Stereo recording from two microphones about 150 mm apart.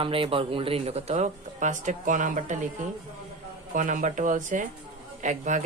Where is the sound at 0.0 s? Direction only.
35° right (ahead or behind); by 2.6 s 55° right (ahead or behind).